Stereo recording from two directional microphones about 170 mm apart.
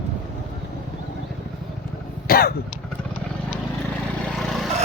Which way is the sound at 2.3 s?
60° left (ahead or behind).